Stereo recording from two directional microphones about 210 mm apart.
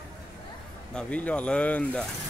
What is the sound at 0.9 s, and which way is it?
Speech, 5° left (ahead or behind).